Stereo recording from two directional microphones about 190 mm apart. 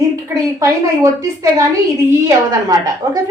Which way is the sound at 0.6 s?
15° right (ahead or behind).